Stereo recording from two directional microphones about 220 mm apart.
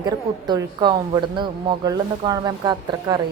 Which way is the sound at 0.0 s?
20° right (ahead or behind).